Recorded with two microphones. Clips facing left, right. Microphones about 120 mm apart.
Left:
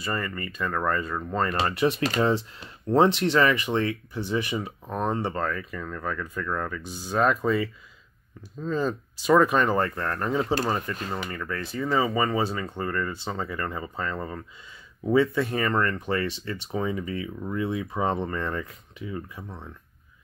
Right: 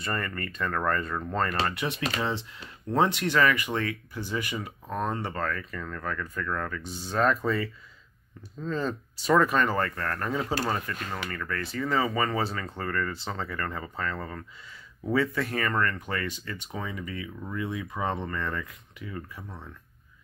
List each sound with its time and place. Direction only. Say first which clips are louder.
0.0 s speech: left 2 dB; 10° left (ahead or behind)
1.8 s speech: left 7 dB; 35° left (ahead or behind)
2.9 s speech: left 5 dB; 30° left (ahead or behind)